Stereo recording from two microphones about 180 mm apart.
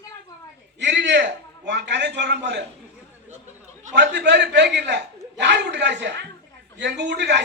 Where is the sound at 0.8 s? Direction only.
75° right (ahead or behind).